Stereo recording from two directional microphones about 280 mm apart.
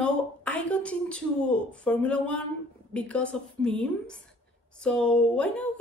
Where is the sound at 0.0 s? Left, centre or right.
Centre.